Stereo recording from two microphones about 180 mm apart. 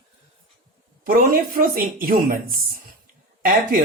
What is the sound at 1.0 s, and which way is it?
Speech, 50° right (ahead or behind).